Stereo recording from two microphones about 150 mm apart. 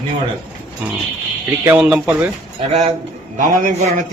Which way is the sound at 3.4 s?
55° right (ahead or behind).